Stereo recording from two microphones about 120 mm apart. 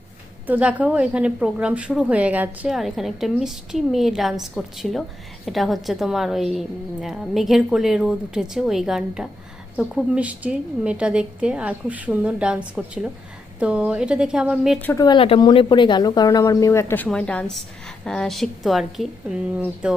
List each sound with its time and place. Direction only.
0.4 s a woman's voice: 10° right (ahead or behind)
14.9 s speech: 35° left (ahead or behind)
17.1 s a woman's voice: 10° left (ahead or behind); by 20.0 s 10° right (ahead or behind)